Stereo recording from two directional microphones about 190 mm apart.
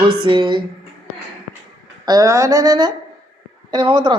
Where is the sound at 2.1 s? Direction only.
15° right (ahead or behind).